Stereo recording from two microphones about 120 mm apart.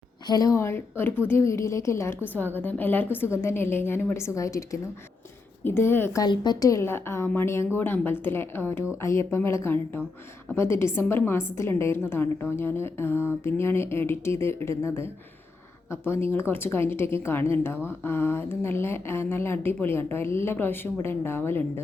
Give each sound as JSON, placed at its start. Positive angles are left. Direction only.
{"t": 0.3, "sound": "speech", "side_deg": 30}
{"t": 6.2, "sound": "speech", "side_deg": 35}